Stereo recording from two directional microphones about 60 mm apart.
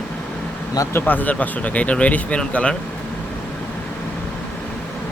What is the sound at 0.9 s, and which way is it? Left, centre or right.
Speech, left.